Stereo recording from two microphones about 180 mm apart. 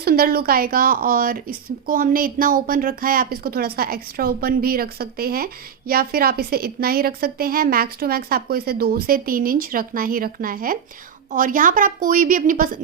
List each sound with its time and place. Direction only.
0.0 s a woman's voice: 55° right (ahead or behind)